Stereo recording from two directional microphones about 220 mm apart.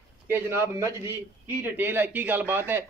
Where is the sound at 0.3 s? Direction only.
10° right (ahead or behind).